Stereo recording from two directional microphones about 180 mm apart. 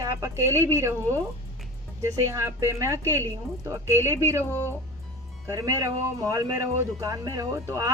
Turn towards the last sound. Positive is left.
turn(degrees=-15)  # may be behind; listen again after turning